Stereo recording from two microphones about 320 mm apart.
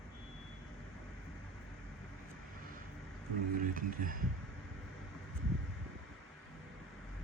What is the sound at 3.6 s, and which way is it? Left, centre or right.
Speech, right.